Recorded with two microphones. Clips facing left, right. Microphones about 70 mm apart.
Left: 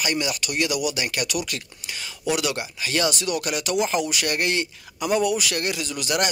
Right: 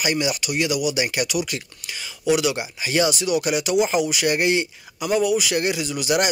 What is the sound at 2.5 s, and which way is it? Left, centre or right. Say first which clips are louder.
Speech: right 3 dB; centre.